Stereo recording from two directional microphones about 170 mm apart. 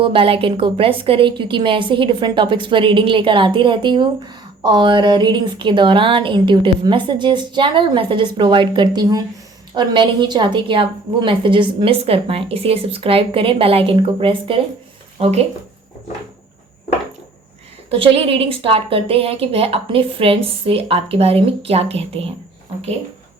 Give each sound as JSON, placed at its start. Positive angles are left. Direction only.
{"t": 0.0, "sound": "a woman's voice", "side_deg": -30}
{"t": 17.9, "sound": "a woman's voice", "side_deg": -30}